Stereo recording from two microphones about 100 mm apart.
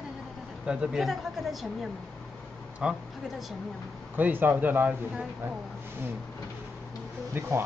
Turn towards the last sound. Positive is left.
turn(degrees=-25)  # may be behind; listen again after turning